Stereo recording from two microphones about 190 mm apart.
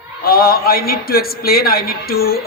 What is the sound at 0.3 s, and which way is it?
A man's voice, 50° left (ahead or behind).